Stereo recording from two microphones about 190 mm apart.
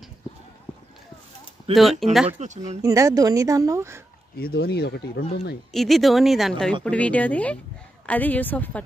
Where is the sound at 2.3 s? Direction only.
40° right (ahead or behind).